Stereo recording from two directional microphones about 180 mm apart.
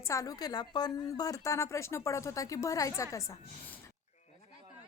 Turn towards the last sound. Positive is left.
turn(degrees=15)  # may be behind; listen again after turning